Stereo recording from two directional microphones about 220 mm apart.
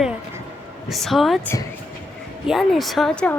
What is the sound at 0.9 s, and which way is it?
A woman's voice, centre (ahead or behind).